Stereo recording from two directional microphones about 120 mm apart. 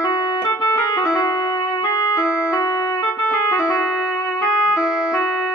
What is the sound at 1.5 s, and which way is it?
Music, 30° left (ahead or behind).